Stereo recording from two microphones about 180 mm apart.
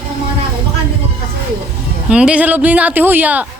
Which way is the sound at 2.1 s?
5° right (ahead or behind).